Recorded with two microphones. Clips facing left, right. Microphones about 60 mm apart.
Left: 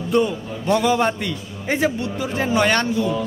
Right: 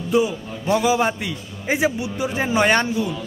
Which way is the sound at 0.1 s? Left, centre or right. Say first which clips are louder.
Even; centre.